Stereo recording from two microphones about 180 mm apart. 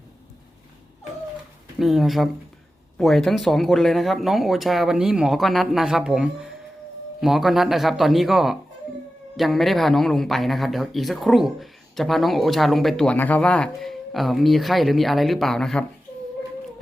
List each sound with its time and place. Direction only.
1.8 s speech: centre (ahead or behind)